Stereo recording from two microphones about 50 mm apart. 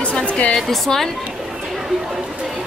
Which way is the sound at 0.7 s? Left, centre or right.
Centre.